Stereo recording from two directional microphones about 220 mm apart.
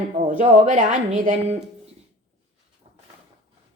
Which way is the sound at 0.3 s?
35° right (ahead or behind).